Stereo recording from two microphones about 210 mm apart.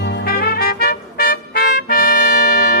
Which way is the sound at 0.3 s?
45° left (ahead or behind).